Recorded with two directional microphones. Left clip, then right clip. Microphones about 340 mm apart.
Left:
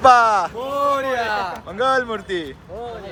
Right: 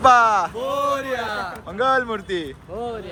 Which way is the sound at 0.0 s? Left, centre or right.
Centre.